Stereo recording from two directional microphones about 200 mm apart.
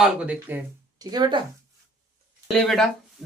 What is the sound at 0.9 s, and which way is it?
Speech, 20° right (ahead or behind).